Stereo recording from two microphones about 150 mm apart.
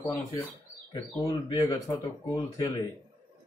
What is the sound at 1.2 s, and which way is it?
Speech, 25° left (ahead or behind).